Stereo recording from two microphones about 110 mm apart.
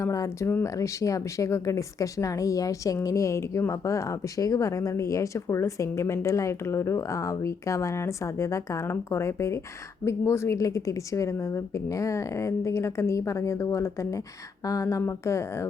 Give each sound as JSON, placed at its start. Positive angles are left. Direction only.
{"t": 0.0, "sound": "speech", "side_deg": 30}